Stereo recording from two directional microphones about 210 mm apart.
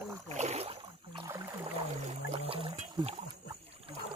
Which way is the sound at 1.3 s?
10° right (ahead or behind).